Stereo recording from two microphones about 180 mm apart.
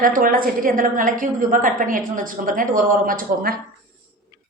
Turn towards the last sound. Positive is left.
turn(degrees=-55)  # may be behind; listen again after turning